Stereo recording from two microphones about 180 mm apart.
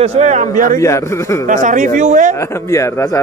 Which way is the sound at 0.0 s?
40° right (ahead or behind).